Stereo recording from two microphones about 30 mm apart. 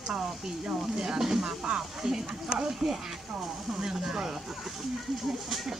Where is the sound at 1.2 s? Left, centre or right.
Centre.